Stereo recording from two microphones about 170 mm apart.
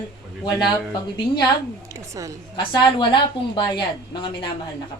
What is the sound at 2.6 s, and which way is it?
A woman's voice, 25° left (ahead or behind).